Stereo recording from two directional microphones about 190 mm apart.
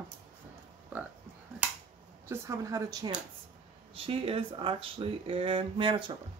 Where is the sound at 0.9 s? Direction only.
10° right (ahead or behind).